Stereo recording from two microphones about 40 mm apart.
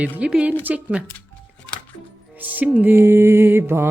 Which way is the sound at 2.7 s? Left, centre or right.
Right.